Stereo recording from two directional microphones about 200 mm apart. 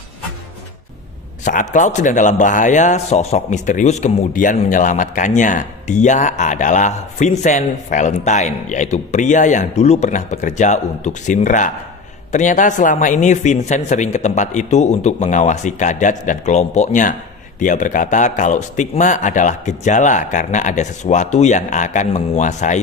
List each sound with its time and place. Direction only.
1.4 s speech: 40° left (ahead or behind)